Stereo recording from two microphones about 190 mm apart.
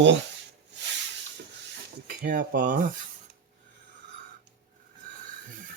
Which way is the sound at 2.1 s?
45° right (ahead or behind).